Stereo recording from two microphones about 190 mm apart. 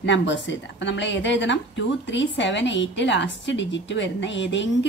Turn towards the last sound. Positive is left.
turn(degrees=70)  # may be behind; listen again after turning